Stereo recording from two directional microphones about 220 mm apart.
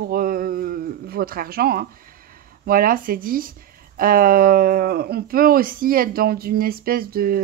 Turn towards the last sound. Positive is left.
turn(degrees=-40)  # may be behind; listen again after turning